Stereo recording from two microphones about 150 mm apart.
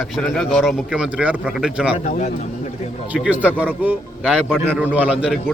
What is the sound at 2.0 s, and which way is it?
Speech, 55° left (ahead or behind).